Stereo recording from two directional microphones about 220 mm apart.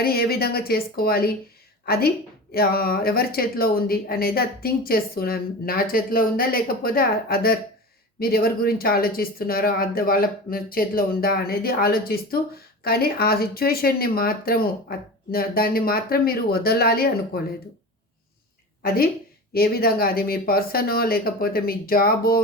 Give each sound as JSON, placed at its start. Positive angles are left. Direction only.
{"t": 0.0, "sound": "speech", "side_deg": 45}
{"t": 18.8, "sound": "a woman's voice", "side_deg": 40}